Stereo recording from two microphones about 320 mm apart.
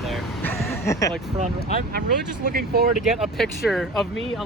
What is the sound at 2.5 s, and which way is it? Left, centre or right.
Speech, right.